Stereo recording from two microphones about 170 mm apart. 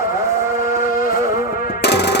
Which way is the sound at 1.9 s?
80° left.